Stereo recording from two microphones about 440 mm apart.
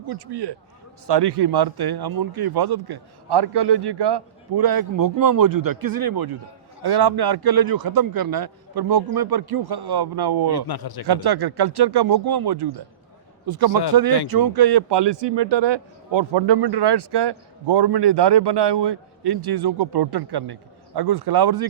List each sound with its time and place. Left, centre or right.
0.1 s speech: right
10.7 s a man's voice: left
11.0 s a man's voice: right